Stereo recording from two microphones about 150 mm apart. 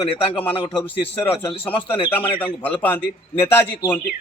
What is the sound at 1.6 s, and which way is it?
Speech, 10° left (ahead or behind).